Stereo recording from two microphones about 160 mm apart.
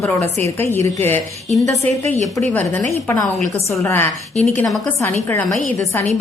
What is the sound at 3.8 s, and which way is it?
A woman's voice, 15° left (ahead or behind).